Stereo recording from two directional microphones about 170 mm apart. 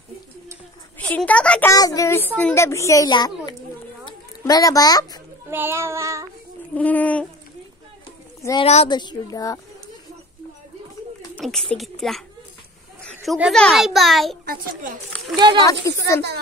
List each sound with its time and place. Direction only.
0.9 s a woman's voice: 10° left (ahead or behind)
1.7 s a child's voice: 20° left (ahead or behind)
5.5 s child singing: 15° right (ahead or behind)
6.7 s a sound: 10° left (ahead or behind)
8.4 s a woman's voice: 20° left (ahead or behind)
11.3 s a child's voice: centre (ahead or behind)
14.4 s a woman's voice: 60° right (ahead or behind)
15.3 s speech: 25° right (ahead or behind)
15.8 s a child's voice: 20° left (ahead or behind)